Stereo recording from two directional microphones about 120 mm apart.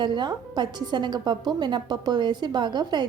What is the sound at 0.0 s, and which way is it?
A woman's voice, 40° right (ahead or behind).